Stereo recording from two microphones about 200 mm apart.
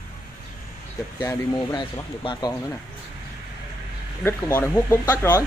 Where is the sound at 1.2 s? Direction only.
20° left (ahead or behind).